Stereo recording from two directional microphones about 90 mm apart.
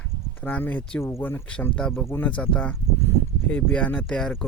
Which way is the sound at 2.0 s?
20° left (ahead or behind).